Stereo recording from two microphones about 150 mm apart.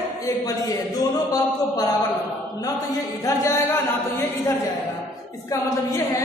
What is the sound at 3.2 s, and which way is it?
Music, 20° left (ahead or behind).